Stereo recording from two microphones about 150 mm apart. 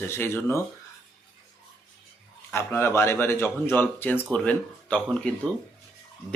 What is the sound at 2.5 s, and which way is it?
A man's voice, 15° left (ahead or behind).